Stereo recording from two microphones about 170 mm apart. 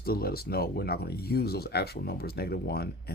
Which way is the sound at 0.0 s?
60° left (ahead or behind).